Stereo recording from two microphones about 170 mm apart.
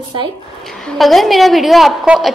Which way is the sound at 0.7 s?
Centre (ahead or behind).